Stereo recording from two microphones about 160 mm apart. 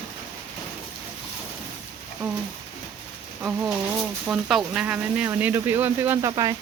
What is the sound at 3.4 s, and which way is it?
Speech, 5° right (ahead or behind).